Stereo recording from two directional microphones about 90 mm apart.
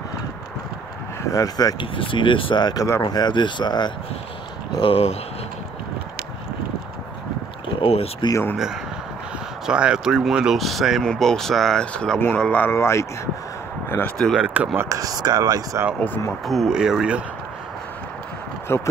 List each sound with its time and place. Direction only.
1.3 s speech: 40° left (ahead or behind)
1.8 s speech: 70° left (ahead or behind)
2.6 s speech: 45° left (ahead or behind)
4.7 s speech: 85° left
7.8 s speech: 90° left
9.7 s speech: 10° right (ahead or behind); by 12.6 s 15° left (ahead or behind)
12.6 s speech: 30° left (ahead or behind)
14.1 s speech: 5° left (ahead or behind)
14.4 s a sound: 15° right (ahead or behind)
14.8 s speech: 40° right (ahead or behind)
16.4 s speech: 5° right (ahead or behind)
18.7 s speech: 30° left (ahead or behind)